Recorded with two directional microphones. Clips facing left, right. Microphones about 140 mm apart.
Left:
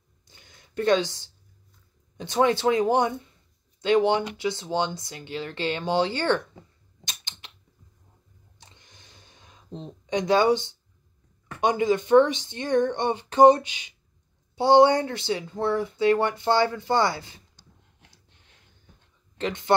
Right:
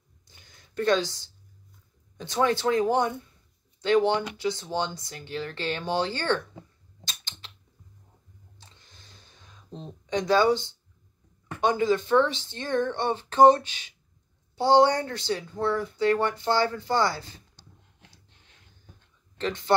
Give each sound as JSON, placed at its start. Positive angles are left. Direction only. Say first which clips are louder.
{"t": 0.4, "sound": "a sound", "louder": "left 1 dB", "side_deg": 20}
{"t": 2.1, "sound": "speech", "louder": "left 3 dB", "side_deg": 20}
{"t": 7.1, "sound": "typewriter", "louder": "left 1 dB", "side_deg": 20}
{"t": 8.5, "sound": "a sound", "louder": "left 3 dB", "side_deg": 20}
{"t": 11.6, "sound": "speech", "louder": "left 1 dB", "side_deg": 15}
{"t": 19.4, "sound": "speech", "louder": "left 1 dB", "side_deg": 20}